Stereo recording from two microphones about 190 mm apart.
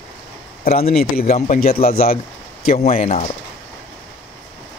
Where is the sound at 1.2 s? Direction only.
35° left (ahead or behind).